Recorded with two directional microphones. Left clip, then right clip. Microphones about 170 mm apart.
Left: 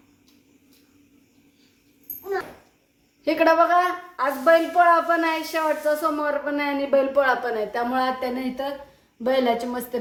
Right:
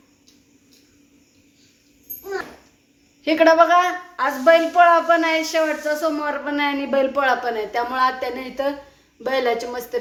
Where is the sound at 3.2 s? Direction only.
5° right (ahead or behind).